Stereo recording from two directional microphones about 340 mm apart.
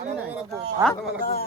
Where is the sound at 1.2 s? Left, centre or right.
Left.